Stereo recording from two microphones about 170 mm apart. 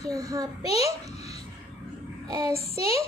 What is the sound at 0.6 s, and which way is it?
Speech, 35° left (ahead or behind).